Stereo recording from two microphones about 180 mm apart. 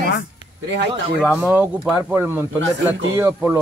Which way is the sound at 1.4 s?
10° right (ahead or behind).